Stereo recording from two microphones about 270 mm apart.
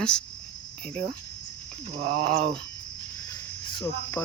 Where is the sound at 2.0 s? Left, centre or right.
Right.